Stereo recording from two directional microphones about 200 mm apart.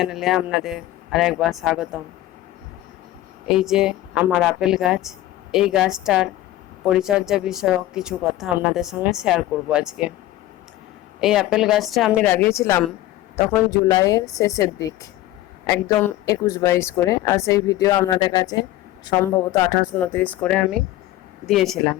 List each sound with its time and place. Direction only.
0.0 s a woman's voice: centre (ahead or behind)
3.5 s a woman's voice: centre (ahead or behind)
11.2 s a woman's voice: centre (ahead or behind)
12.3 s a woman's voice: 10° left (ahead or behind)